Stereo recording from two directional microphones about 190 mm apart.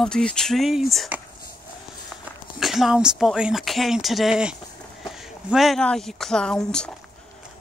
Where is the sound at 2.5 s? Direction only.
Centre (ahead or behind).